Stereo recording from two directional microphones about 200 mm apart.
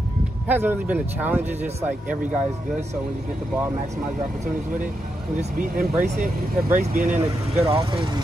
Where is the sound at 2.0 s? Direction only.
40° right (ahead or behind).